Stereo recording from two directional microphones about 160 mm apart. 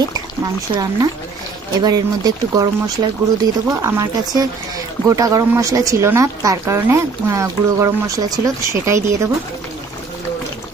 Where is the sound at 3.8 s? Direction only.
20° right (ahead or behind).